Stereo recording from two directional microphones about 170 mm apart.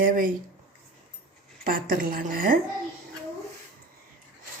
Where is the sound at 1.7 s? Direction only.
55° right (ahead or behind).